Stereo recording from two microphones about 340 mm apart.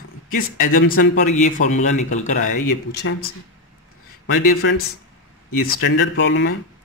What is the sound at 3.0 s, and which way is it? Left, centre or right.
Speech, left.